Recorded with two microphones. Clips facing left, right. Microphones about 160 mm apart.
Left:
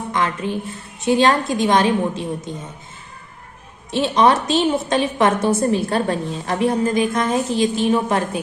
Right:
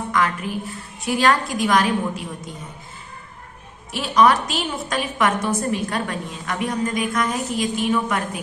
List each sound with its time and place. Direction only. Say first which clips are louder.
0.1 s a woman's voice: left 1 dB; 25° left (ahead or behind)
3.9 s a woman's voice: left 2 dB; 25° left (ahead or behind)